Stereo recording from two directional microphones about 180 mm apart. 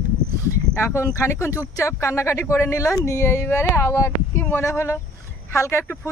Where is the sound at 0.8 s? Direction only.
15° left (ahead or behind).